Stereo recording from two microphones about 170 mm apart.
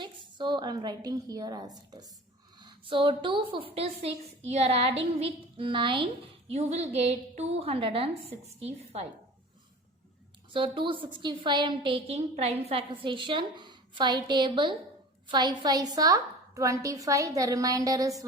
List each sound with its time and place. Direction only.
0.0 s a woman's voice: 25° right (ahead or behind)
10.5 s a woman's voice: 30° right (ahead or behind)